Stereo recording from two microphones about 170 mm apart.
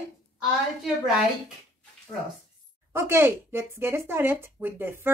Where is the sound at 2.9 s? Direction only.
15° right (ahead or behind).